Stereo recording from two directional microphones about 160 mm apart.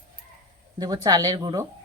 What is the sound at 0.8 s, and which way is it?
Speech, 25° right (ahead or behind).